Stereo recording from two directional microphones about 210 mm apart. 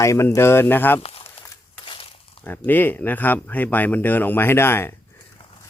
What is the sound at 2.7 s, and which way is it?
Speech, 10° left (ahead or behind).